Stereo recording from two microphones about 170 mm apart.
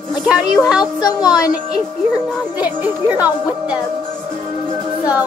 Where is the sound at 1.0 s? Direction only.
25° left (ahead or behind).